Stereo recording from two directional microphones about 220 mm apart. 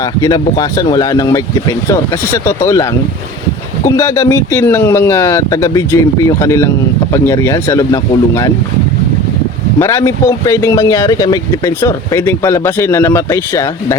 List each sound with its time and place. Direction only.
0.0 s speech: 15° left (ahead or behind)
3.8 s speech: 15° left (ahead or behind)
9.7 s speech: 10° left (ahead or behind)